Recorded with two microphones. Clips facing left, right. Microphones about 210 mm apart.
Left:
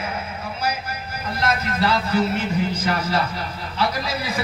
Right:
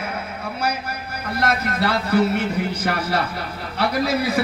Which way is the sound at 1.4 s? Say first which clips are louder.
Right 1 dB; 60° right (ahead or behind).